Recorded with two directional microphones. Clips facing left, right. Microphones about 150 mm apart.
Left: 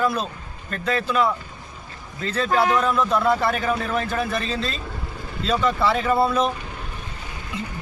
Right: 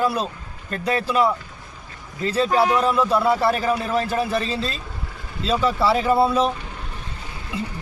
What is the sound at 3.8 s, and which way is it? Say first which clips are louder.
Speech: right 2 dB; 35° right (ahead or behind).